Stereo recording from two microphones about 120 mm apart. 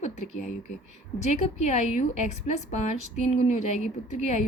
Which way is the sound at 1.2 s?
70° left (ahead or behind).